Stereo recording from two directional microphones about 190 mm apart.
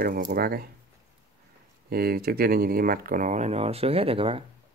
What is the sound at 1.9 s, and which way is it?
Speech, 55° right (ahead or behind).